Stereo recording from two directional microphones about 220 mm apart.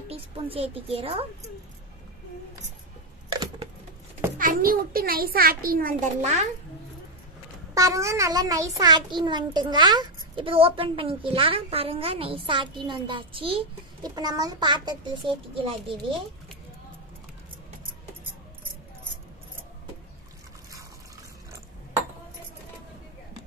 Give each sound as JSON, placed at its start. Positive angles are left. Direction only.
{"t": 0.1, "sound": "a child's voice", "side_deg": -25}
{"t": 4.4, "sound": "a child's voice", "side_deg": -40}
{"t": 7.7, "sound": "a child's voice", "side_deg": -15}